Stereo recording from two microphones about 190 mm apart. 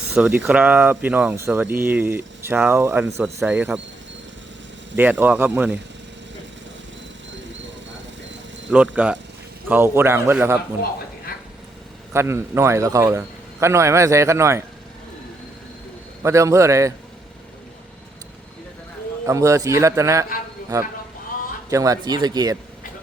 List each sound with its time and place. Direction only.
0.2 s speech: 5° right (ahead or behind)
4.9 s speech: 10° right (ahead or behind)
8.7 s speech: 10° right (ahead or behind)
12.1 s speech: 15° right (ahead or behind)
16.2 s speech: 15° right (ahead or behind)
19.2 s speech: 15° right (ahead or behind)